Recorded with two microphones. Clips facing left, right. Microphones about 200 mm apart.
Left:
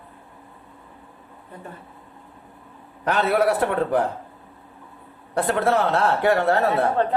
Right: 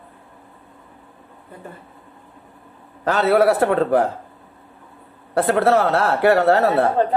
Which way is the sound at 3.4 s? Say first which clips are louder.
Right 4 dB; 85° right.